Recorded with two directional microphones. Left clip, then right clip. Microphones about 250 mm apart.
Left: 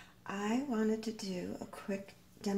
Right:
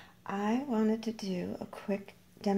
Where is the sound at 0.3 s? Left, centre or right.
Right.